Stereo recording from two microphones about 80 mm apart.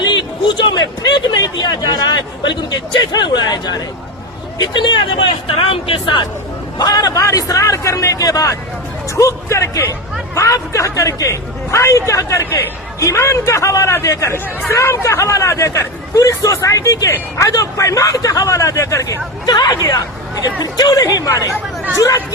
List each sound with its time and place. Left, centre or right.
0.0 s speech: left
6.7 s speech: left
12.5 s speech: left
13.0 s speech: left
19.5 s speech: left